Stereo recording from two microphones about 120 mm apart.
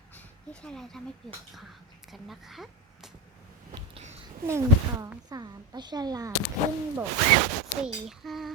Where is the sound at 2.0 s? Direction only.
Centre (ahead or behind).